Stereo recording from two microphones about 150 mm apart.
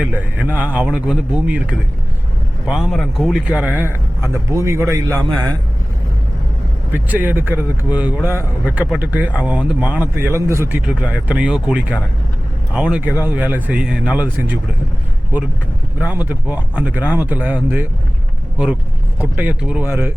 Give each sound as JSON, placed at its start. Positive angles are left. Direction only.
{"t": 0.0, "sound": "speech", "side_deg": -10}
{"t": 2.6, "sound": "a man's voice", "side_deg": 0}
{"t": 4.2, "sound": "speech", "side_deg": -20}
{"t": 6.9, "sound": "speech", "side_deg": -10}
{"t": 16.0, "sound": "speech", "side_deg": -10}